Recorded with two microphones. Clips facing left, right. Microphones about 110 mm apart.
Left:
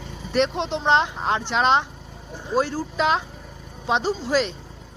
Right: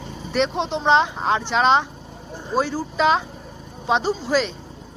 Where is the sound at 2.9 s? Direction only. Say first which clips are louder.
Right 3 dB; 10° left (ahead or behind).